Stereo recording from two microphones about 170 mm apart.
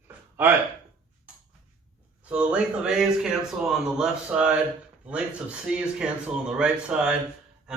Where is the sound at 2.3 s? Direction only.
5° right (ahead or behind).